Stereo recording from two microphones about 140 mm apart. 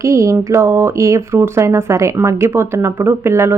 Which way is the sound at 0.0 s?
20° right (ahead or behind).